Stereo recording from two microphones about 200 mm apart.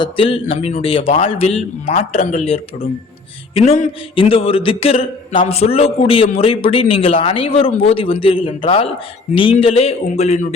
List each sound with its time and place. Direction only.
0.0 s speech: 25° left (ahead or behind)